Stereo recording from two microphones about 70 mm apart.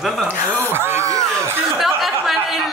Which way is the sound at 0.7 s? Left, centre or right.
Right.